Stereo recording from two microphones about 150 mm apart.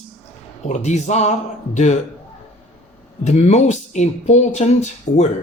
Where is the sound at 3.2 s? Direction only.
50° left (ahead or behind).